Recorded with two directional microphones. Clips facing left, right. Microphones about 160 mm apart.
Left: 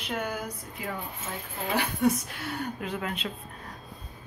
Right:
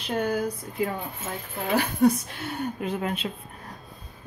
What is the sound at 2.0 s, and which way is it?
Speech, 40° right (ahead or behind).